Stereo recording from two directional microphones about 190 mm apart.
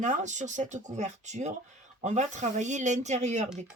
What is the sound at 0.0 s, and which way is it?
Speech, 40° right (ahead or behind).